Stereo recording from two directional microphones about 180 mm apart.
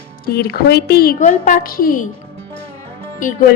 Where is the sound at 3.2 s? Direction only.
50° left (ahead or behind).